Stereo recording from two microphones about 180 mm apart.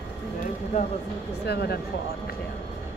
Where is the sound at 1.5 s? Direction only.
65° left (ahead or behind).